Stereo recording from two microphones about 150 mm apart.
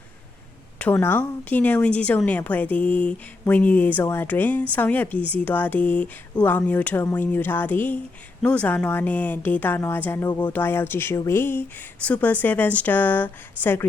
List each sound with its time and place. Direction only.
0.8 s speech: 15° left (ahead or behind)